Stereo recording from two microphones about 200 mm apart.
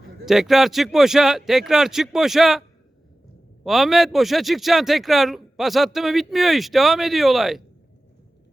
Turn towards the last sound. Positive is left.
turn(degrees=0)  # may be behind; listen again after turning